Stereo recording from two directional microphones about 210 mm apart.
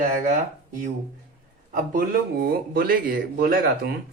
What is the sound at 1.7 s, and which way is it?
Speech, 40° right (ahead or behind).